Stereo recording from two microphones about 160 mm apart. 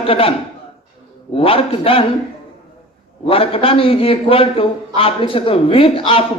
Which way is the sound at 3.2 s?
35° left (ahead or behind).